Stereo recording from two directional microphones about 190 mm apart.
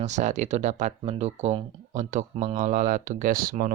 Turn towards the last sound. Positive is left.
turn(degrees=-45)  # may be behind; listen again after turning